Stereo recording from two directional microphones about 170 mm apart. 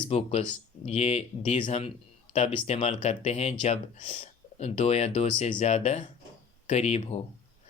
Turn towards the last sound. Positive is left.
turn(degrees=35)  # may be behind; listen again after turning